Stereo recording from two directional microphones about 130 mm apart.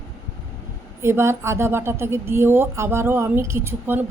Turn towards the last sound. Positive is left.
turn(degrees=-15)  # may be behind; listen again after turning